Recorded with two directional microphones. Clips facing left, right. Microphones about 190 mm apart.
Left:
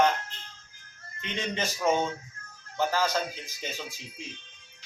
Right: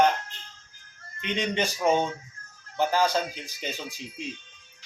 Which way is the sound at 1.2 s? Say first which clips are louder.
Right 5 dB; 15° right (ahead or behind).